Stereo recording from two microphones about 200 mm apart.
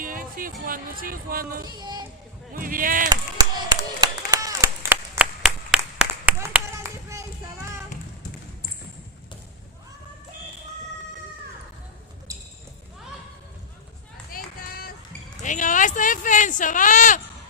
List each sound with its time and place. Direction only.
0.0 s music: 45° right (ahead or behind)
0.7 s speech: 45° right (ahead or behind)
1.6 s child singing: 20° right (ahead or behind)
2.5 s speech: 45° right (ahead or behind)
3.1 s clapping: 20° right (ahead or behind)
4.3 s applause: 15° right (ahead or behind)
14.3 s music: 45° left (ahead or behind)
15.4 s speech: 40° left (ahead or behind)